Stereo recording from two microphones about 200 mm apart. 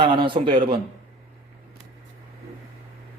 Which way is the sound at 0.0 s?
25° right (ahead or behind).